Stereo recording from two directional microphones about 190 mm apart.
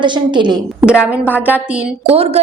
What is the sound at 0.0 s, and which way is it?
Speech, 25° right (ahead or behind).